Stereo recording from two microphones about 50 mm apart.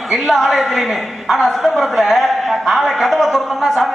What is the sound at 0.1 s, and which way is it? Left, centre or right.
A woman's voice, centre.